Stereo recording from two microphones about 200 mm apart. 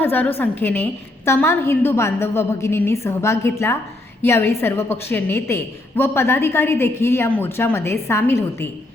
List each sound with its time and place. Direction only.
0.0 s a woman's voice: 10° left (ahead or behind)